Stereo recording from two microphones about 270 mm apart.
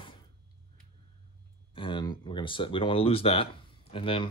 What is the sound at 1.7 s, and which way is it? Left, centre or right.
Speech, centre.